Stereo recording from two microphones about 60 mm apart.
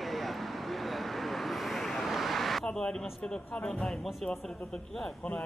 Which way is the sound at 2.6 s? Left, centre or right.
Centre.